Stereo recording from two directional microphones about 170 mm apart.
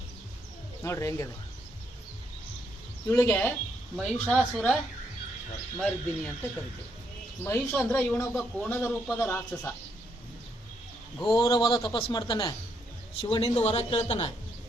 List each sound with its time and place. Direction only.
0.8 s speech: 15° left (ahead or behind)
3.1 s speech: 15° left (ahead or behind)
7.4 s speech: 10° left (ahead or behind)
11.3 s a man's voice: 25° left (ahead or behind)